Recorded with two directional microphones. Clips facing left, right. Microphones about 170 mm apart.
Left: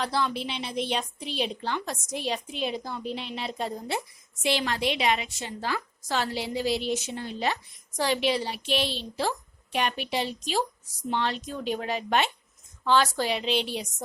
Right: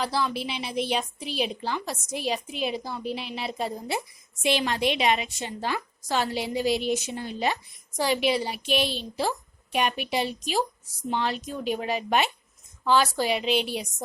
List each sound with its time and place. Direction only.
0.0 s a woman's voice: 5° right (ahead or behind)